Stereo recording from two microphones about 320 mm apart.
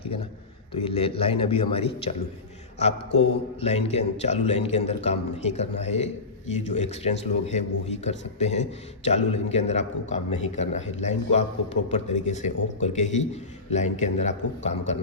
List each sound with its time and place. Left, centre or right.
0.0 s a sound: centre
0.7 s a man's voice: centre
3.2 s a man's voice: centre